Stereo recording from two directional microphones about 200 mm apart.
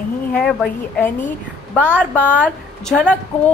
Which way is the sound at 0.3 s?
5° left (ahead or behind).